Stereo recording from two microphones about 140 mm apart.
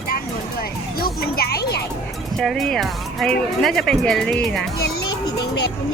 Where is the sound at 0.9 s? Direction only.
90° left.